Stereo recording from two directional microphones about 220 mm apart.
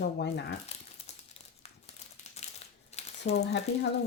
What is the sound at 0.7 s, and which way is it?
Crumpling, 30° left (ahead or behind).